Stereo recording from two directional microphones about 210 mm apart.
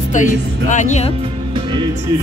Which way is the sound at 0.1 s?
35° left (ahead or behind).